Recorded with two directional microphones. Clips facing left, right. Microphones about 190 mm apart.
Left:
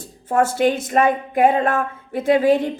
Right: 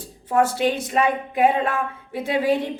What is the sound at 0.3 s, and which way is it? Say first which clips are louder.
A woman's voice: left 2 dB; 50° left (ahead or behind).